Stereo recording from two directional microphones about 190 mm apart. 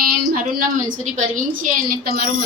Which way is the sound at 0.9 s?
40° right (ahead or behind).